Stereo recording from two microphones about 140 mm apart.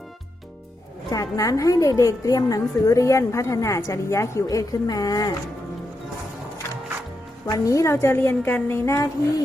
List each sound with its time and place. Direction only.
1.1 s a woman's voice: 25° left (ahead or behind)
7.4 s a woman's voice: 25° left (ahead or behind)